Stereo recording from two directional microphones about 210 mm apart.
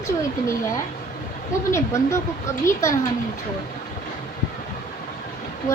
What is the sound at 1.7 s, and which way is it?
A woman's voice, 15° left (ahead or behind).